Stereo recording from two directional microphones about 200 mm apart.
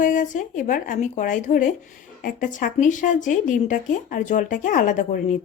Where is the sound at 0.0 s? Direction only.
40° left (ahead or behind).